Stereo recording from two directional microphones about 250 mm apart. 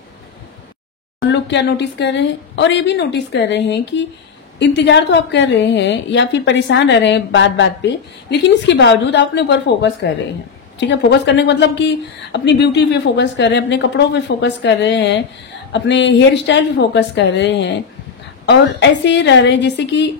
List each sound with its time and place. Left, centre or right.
1.2 s a woman's voice: left